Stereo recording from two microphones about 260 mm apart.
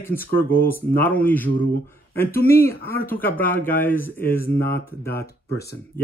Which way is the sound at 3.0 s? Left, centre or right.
Centre.